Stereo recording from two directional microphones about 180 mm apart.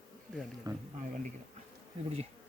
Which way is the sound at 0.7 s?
20° right (ahead or behind).